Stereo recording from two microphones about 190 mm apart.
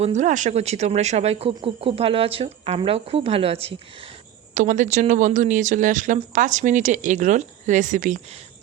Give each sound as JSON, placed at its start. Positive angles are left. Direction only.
{"t": 0.0, "sound": "speech", "side_deg": -40}
{"t": 4.5, "sound": "speech", "side_deg": -40}